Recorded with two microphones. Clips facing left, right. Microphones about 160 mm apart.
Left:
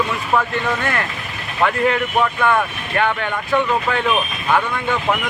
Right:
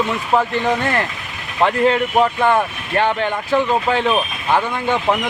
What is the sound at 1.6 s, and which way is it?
Speech, 30° right (ahead or behind).